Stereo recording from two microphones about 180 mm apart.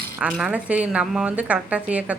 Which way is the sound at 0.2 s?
5° right (ahead or behind).